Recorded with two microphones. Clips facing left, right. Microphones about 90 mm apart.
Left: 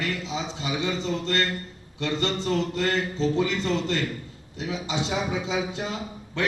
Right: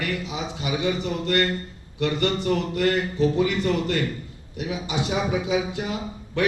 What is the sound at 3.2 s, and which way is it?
Speech, 20° right (ahead or behind).